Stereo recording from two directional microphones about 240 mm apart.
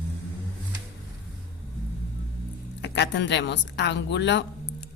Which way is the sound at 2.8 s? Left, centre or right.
Left.